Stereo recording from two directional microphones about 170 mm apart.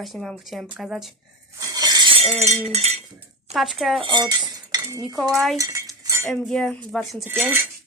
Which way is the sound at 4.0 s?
25° right (ahead or behind).